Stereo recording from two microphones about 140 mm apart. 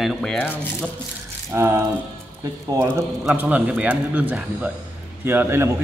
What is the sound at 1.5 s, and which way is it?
A man's voice, 20° right (ahead or behind).